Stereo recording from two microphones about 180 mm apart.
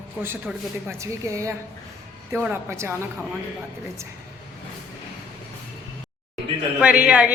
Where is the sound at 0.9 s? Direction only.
15° right (ahead or behind).